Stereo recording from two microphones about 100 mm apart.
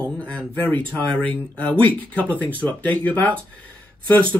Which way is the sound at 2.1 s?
15° left (ahead or behind).